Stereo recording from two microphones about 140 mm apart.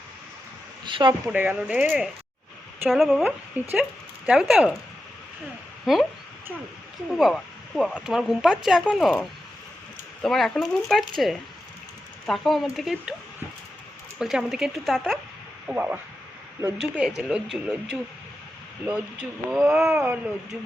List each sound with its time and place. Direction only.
0.9 s speech: 35° right (ahead or behind)
1.3 s speech: 10° right (ahead or behind)
3.2 s speech: 10° right (ahead or behind)
5.8 s speech: centre (ahead or behind)
7.1 s speech: centre (ahead or behind)
10.2 s speech: centre (ahead or behind)
14.2 s speech: 5° right (ahead or behind)
15.6 s speech: 10° right (ahead or behind)